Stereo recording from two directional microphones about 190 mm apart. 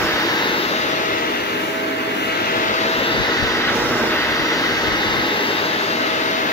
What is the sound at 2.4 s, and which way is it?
Vehicle, 40° left (ahead or behind).